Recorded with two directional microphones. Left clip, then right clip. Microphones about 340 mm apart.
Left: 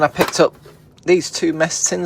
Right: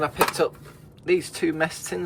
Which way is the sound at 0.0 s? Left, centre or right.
Left.